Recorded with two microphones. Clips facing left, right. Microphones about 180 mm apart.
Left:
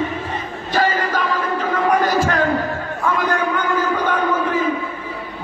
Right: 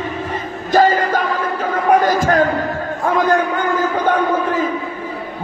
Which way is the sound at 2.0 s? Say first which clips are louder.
Right 3 dB; 45° right (ahead or behind).